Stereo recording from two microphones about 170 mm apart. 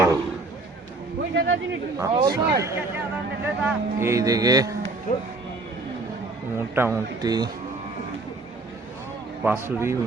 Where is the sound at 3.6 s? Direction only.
15° right (ahead or behind).